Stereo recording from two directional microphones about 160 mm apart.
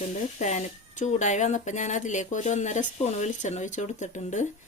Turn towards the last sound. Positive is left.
turn(degrees=50)  # may be behind; listen again after turning